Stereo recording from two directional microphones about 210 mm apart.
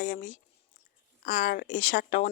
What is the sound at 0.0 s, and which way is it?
Speech, 35° left (ahead or behind).